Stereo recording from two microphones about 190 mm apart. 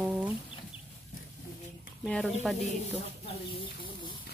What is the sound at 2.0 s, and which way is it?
Speech, centre (ahead or behind).